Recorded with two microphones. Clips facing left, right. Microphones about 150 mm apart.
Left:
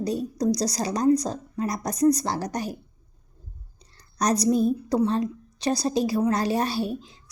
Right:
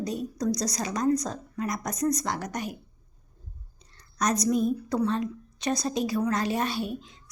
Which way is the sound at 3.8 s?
35° left (ahead or behind).